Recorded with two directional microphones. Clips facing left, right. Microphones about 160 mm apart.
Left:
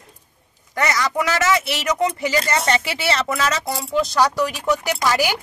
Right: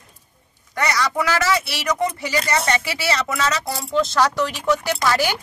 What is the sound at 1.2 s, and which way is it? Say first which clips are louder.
Speech: left 2 dB; 20° left (ahead or behind).